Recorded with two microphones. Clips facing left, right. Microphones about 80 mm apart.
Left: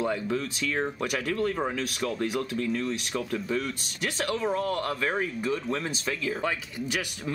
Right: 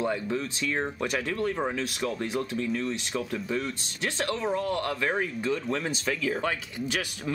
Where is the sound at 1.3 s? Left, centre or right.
Centre.